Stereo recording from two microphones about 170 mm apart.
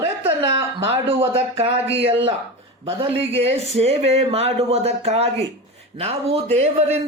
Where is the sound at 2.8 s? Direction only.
35° right (ahead or behind).